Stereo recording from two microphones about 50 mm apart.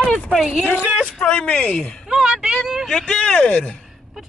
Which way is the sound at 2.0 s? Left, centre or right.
Centre.